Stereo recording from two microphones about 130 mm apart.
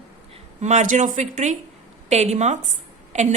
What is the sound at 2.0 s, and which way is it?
A woman's voice, 60° right (ahead or behind).